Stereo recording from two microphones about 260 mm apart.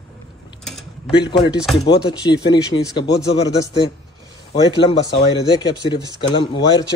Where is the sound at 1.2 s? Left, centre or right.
Centre.